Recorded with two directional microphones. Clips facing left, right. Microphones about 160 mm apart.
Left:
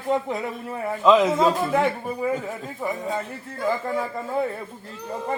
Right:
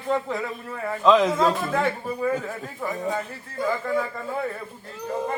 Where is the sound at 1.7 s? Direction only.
20° left (ahead or behind).